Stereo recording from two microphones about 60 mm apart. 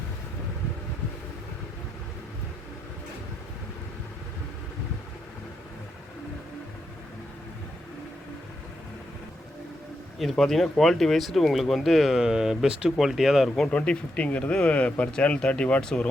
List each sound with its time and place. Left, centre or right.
10.2 s speech: centre
13.7 s speech: centre